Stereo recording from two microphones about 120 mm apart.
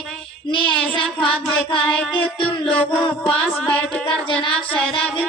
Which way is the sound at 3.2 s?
5° left (ahead or behind).